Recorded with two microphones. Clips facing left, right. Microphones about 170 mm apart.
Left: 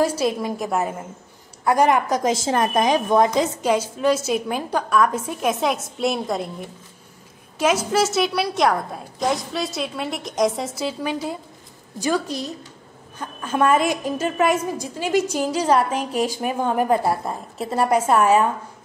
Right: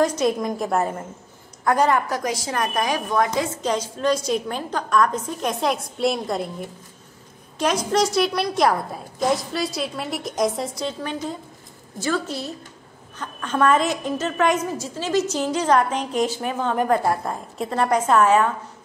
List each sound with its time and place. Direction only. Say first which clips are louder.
0.4 s a woman's voice: right 1 dB; 5° left (ahead or behind); by 3.3 s 25° left (ahead or behind)
4.0 s a woman's voice: left 1 dB; 5° left (ahead or behind)
7.5 s a woman's voice: left 1 dB; 5° left (ahead or behind)